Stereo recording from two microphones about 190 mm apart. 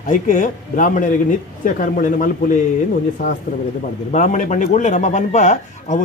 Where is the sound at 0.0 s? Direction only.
45° left (ahead or behind).